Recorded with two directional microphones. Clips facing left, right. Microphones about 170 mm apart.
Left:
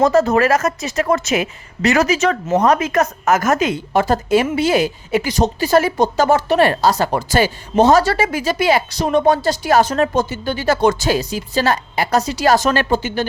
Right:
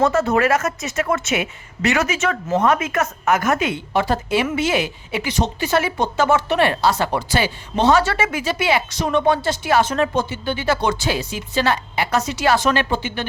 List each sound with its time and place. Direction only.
0.0 s a woman's voice: 35° left (ahead or behind)